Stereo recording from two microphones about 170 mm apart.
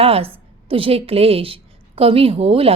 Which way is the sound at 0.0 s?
35° right (ahead or behind).